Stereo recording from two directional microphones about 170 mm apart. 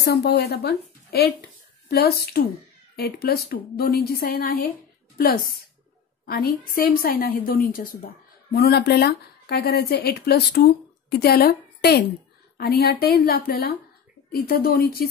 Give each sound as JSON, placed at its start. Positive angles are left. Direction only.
{"t": 0.0, "sound": "speech", "side_deg": 75}
{"t": 1.9, "sound": "a woman's voice", "side_deg": 65}
{"t": 8.5, "sound": "a woman's voice", "side_deg": 70}